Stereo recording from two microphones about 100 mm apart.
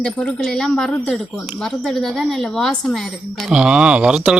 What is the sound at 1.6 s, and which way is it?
Speech, 5° left (ahead or behind).